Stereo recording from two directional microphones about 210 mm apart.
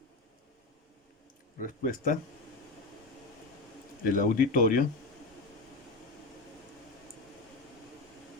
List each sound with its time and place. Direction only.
1.5 s speech: 40° left (ahead or behind)
4.1 s speech: 40° left (ahead or behind)